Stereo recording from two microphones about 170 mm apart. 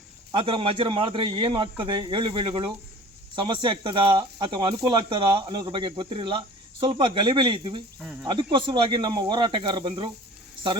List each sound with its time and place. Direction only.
0.3 s speech: 30° right (ahead or behind)